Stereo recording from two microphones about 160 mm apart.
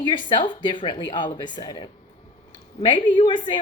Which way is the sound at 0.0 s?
30° left (ahead or behind).